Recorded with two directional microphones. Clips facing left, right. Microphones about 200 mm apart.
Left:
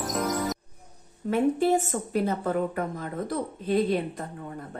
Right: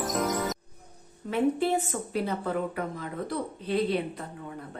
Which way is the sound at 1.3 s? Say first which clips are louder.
Left 3 dB; 45° left (ahead or behind).